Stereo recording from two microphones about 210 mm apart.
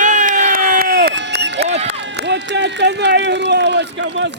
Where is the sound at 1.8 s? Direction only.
55° right (ahead or behind).